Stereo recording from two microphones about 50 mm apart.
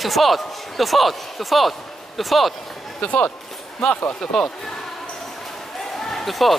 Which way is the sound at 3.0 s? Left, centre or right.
Left.